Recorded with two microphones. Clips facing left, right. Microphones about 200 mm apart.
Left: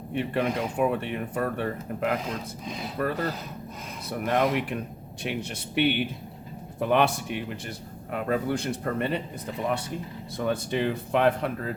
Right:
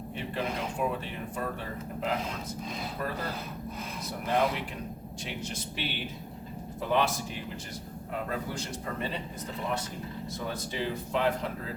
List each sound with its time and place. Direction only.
0.1 s speech: 60° left (ahead or behind)
4.3 s speech: 60° left (ahead or behind)
10.3 s speech: 60° left (ahead or behind)